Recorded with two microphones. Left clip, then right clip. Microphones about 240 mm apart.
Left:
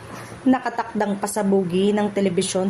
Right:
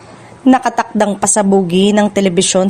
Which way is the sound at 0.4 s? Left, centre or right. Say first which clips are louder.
Right 10 dB; right.